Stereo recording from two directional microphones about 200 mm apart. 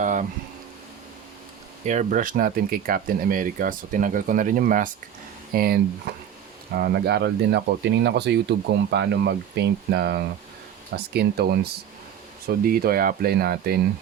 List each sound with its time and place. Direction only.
0.0 s speech: 40° right (ahead or behind)
1.8 s speech: 35° right (ahead or behind)